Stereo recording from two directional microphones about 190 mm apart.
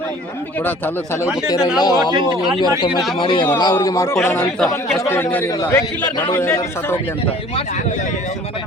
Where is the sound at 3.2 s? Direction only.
25° left (ahead or behind).